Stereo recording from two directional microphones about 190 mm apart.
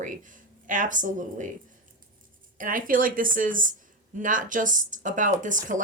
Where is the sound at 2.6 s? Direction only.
45° right (ahead or behind).